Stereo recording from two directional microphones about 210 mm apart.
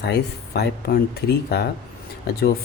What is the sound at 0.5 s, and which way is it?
Speech, 45° left (ahead or behind).